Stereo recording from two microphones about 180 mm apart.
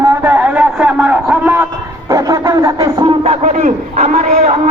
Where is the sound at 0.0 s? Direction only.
15° right (ahead or behind).